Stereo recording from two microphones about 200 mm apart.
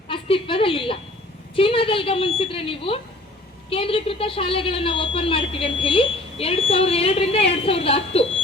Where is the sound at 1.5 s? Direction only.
25° left (ahead or behind).